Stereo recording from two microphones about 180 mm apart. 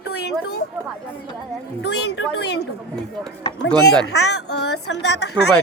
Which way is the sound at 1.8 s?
70° left (ahead or behind).